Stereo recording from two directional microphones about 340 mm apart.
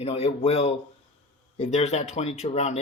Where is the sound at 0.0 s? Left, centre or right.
Centre.